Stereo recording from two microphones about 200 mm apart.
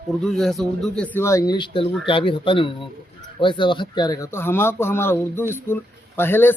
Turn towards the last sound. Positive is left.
turn(degrees=10)  # may be behind; listen again after turning